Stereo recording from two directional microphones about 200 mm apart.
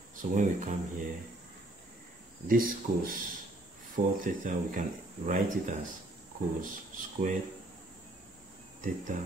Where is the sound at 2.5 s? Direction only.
45° right (ahead or behind).